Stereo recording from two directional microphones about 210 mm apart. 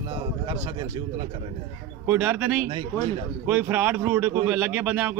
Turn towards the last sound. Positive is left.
turn(degrees=-10)  # may be behind; listen again after turning